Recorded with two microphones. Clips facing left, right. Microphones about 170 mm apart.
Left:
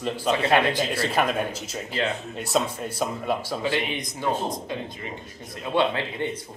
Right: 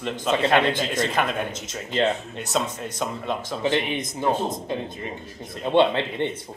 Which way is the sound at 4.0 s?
25° right (ahead or behind).